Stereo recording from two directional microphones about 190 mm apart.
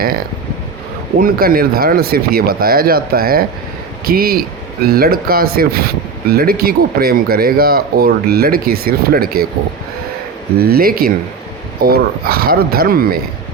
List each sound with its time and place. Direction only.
1.2 s speech: 50° right (ahead or behind)
10.6 s speech: 55° right (ahead or behind)